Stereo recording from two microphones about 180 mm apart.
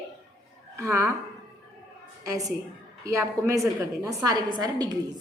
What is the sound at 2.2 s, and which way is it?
A woman's voice, 20° right (ahead or behind).